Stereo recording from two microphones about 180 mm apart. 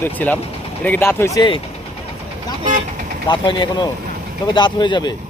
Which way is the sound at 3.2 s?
25° left (ahead or behind).